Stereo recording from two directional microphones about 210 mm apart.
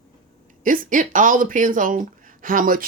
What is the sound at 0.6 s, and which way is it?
Speech, 40° right (ahead or behind).